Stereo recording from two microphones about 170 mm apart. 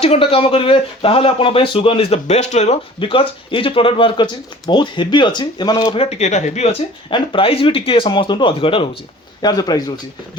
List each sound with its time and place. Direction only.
0.0 s speech: 35° left (ahead or behind)
7.1 s speech: 30° left (ahead or behind)